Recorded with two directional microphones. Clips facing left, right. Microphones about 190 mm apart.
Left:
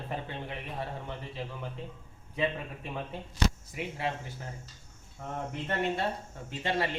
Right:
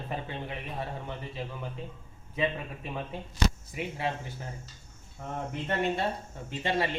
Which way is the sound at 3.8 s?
25° right (ahead or behind).